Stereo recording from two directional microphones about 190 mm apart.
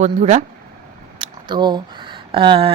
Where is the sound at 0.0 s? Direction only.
40° right (ahead or behind).